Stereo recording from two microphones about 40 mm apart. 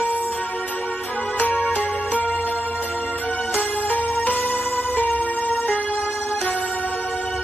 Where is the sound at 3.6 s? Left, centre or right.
Left.